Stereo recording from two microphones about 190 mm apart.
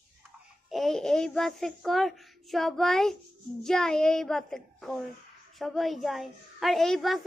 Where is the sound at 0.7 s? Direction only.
Centre (ahead or behind).